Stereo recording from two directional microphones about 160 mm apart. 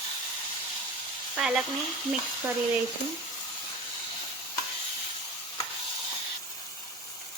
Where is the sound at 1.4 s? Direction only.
5° right (ahead or behind).